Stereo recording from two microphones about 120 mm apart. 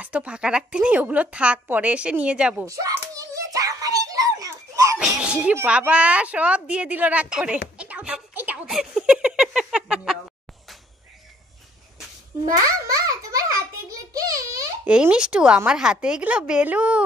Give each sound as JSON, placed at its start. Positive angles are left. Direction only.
{"t": 0.0, "sound": "a woman's voice", "side_deg": -10}
{"t": 2.6, "sound": "hands", "side_deg": -25}
{"t": 5.2, "sound": "a woman's voice", "side_deg": -10}
{"t": 8.6, "sound": "a sound", "side_deg": -5}
{"t": 12.5, "sound": "a sound", "side_deg": -30}
{"t": 14.9, "sound": "a woman's voice", "side_deg": -10}